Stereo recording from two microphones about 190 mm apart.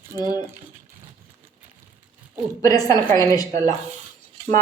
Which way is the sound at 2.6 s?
20° left (ahead or behind).